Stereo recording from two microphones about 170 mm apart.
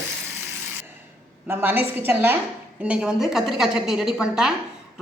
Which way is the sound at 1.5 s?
10° right (ahead or behind).